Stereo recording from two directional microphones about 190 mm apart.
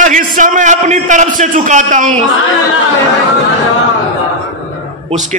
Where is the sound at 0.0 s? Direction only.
40° right (ahead or behind).